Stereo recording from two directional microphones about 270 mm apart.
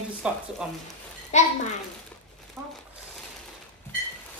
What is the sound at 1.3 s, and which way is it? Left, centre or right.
Speech, left.